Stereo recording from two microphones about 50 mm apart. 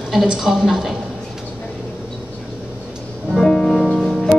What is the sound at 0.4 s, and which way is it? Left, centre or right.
Speech, centre.